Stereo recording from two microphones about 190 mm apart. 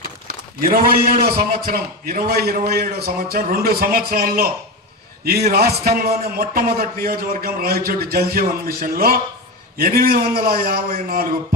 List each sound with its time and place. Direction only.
0.6 s a man's voice: 50° right (ahead or behind)